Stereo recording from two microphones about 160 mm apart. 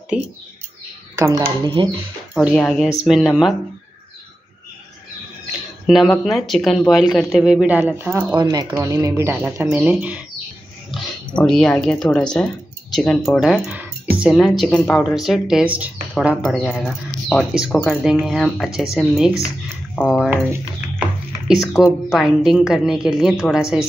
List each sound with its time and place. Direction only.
0.1 s speech: 5° right (ahead or behind)
1.1 s speech: 20° right (ahead or behind)
2.3 s speech: centre (ahead or behind)
5.9 s speech: centre (ahead or behind)
8.4 s speech: 25° right (ahead or behind); by 10.2 s 10° right (ahead or behind)
11.3 s speech: 5° left (ahead or behind)
21.0 s speech: centre (ahead or behind)